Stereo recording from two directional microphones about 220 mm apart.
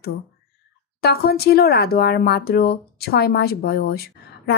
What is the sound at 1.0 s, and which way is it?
Speech, 45° left (ahead or behind).